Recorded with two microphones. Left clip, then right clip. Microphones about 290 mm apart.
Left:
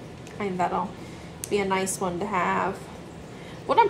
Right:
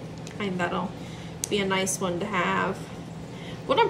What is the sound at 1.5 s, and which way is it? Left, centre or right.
A woman's voice, centre.